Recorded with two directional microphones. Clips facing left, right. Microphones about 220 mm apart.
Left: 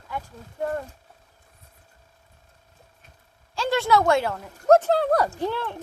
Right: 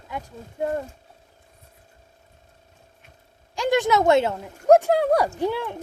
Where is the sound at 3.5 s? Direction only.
15° right (ahead or behind).